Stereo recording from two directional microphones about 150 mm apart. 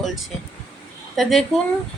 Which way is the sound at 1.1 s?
Centre (ahead or behind).